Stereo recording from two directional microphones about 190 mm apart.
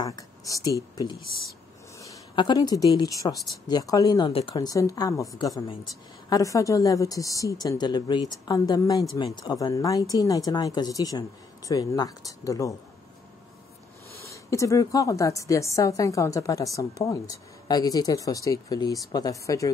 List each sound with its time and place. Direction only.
0.0 s a sound: 20° left (ahead or behind)
0.7 s a woman's voice: 20° left (ahead or behind)
14.2 s a woman's voice: 15° left (ahead or behind)